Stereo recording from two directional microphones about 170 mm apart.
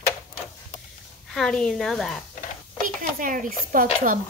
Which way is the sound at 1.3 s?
5° left (ahead or behind).